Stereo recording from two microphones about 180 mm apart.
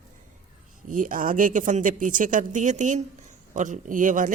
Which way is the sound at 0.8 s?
50° right (ahead or behind).